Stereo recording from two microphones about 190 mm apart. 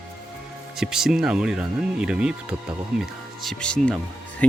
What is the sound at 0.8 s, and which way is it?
Speech, centre (ahead or behind).